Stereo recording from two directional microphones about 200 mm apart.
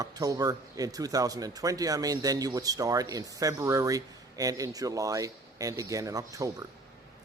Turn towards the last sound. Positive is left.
turn(degrees=-15)  # may be behind; listen again after turning